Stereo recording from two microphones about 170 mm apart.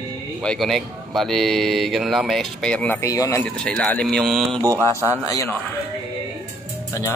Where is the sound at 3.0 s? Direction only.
20° left (ahead or behind).